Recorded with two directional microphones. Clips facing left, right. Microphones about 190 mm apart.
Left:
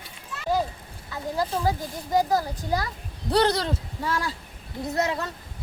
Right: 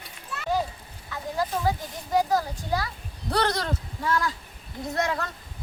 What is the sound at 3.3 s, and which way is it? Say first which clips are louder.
Speech: left 4 dB; 25° left (ahead or behind).